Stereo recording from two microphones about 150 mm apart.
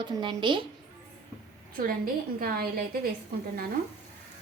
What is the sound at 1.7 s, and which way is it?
A woman's voice, 70° right (ahead or behind).